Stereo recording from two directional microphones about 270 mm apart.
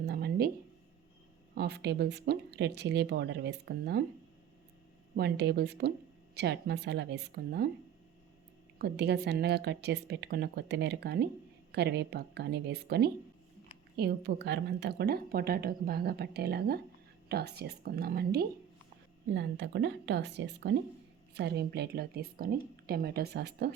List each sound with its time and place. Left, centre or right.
0.0 s a sound: right
1.5 s a woman's voice: right
5.1 s a woman's voice: right
8.8 s a woman's voice: right